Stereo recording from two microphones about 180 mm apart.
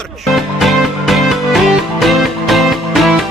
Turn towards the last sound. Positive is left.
turn(degrees=0)  # may be behind; listen again after turning